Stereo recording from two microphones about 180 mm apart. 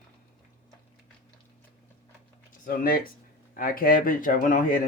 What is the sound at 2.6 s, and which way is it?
Speech, 55° left (ahead or behind).